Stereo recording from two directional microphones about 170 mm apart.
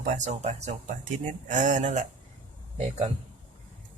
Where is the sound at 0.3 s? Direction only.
40° right (ahead or behind).